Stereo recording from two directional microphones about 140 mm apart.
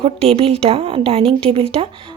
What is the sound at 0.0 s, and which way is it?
A woman's voice, 45° right (ahead or behind).